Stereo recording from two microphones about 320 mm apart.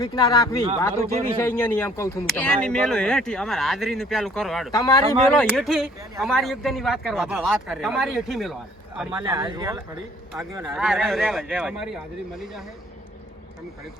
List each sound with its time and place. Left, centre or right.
0.0 s speech: centre
0.9 s a man's voice: right
1.4 s speech: centre
4.7 s speech: centre
9.2 s speech: centre